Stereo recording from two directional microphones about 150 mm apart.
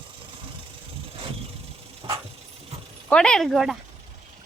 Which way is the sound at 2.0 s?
35° right (ahead or behind).